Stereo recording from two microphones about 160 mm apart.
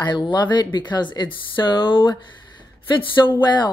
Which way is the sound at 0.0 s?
30° left (ahead or behind).